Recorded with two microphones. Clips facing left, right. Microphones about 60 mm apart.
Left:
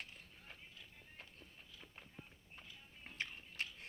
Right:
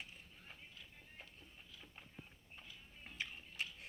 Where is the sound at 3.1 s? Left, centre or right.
Left.